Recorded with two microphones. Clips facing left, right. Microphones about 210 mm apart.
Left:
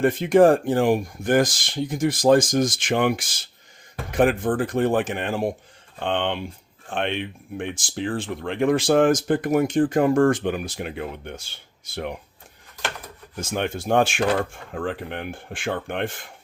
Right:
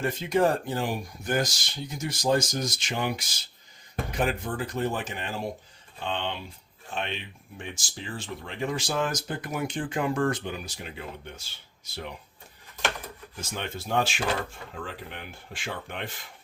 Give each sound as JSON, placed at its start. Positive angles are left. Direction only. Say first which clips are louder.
{"t": 0.0, "sound": "speech", "louder": "left 9 dB", "side_deg": 55}
{"t": 4.1, "sound": "speech", "louder": "left 10 dB", "side_deg": 50}
{"t": 13.3, "sound": "speech", "louder": "left 9 dB", "side_deg": 50}